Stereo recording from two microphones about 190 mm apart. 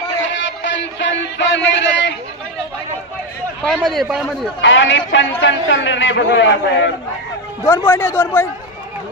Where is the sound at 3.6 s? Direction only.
Centre (ahead or behind).